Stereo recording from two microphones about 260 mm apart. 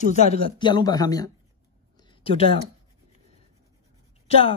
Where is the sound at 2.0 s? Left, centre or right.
Centre.